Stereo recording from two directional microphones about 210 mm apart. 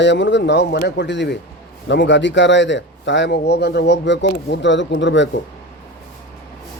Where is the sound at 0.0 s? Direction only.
60° left (ahead or behind).